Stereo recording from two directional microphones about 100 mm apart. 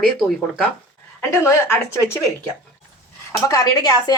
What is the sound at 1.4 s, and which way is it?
Speech, 30° left (ahead or behind).